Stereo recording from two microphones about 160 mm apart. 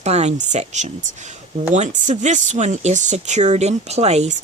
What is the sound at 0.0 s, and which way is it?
Speech, 45° right (ahead or behind).